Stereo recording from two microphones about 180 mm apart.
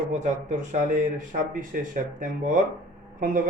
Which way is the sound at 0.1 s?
40° right (ahead or behind).